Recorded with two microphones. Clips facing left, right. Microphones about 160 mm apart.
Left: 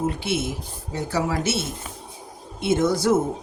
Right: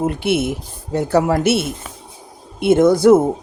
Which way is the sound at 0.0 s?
60° right (ahead or behind).